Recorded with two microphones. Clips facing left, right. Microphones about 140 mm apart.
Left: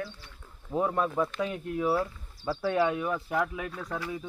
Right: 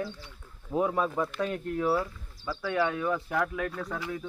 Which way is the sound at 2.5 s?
30° left (ahead or behind).